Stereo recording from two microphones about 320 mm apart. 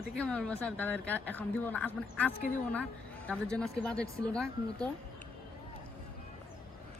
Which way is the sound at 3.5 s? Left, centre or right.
Centre.